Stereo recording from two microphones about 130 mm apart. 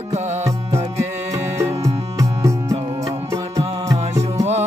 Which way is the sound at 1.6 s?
25° right (ahead or behind).